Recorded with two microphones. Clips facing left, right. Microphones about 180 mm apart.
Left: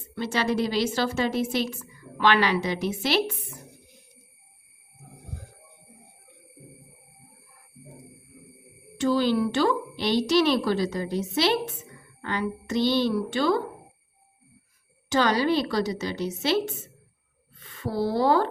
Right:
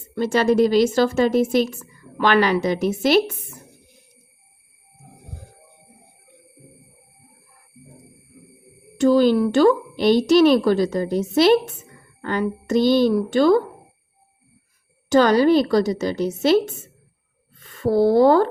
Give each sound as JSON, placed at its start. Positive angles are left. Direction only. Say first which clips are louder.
{"t": 0.2, "sound": "a woman's voice", "louder": "right 9 dB", "side_deg": -45}
{"t": 9.0, "sound": "a woman's voice", "louder": "right 7 dB", "side_deg": -45}
{"t": 15.1, "sound": "a woman's voice", "louder": "right 8 dB", "side_deg": -45}